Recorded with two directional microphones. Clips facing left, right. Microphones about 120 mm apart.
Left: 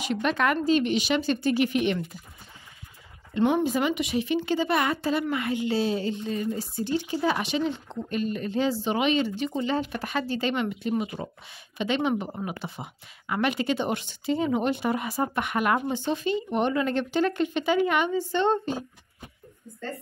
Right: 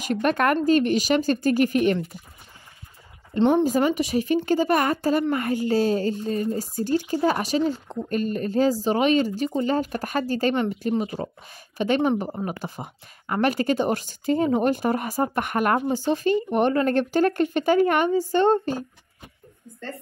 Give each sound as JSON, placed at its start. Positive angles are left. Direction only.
{"t": 0.0, "sound": "speech", "side_deg": -50}
{"t": 3.3, "sound": "speech", "side_deg": -30}
{"t": 3.6, "sound": "speech", "side_deg": -40}